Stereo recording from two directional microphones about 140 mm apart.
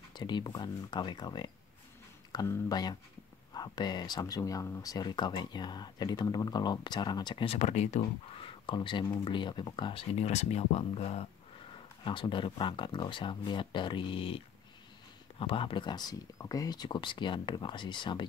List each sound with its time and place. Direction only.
0.1 s speech: 30° left (ahead or behind)
7.5 s speech: 55° left (ahead or behind)
8.4 s speech: 35° left (ahead or behind)
12.0 s speech: 35° left (ahead or behind)